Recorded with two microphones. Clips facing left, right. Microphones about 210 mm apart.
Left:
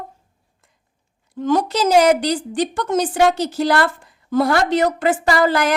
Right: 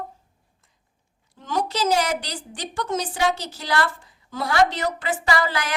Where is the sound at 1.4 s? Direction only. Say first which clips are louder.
Left 7 dB; 50° left (ahead or behind).